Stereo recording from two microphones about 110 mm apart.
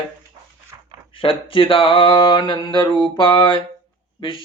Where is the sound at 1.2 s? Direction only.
55° left (ahead or behind).